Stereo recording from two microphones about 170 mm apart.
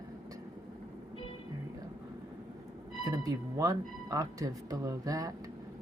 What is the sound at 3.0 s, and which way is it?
Speech, 20° right (ahead or behind).